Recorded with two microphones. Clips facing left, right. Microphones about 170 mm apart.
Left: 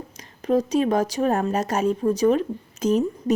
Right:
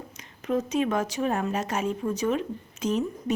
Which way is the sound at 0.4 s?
35° left (ahead or behind).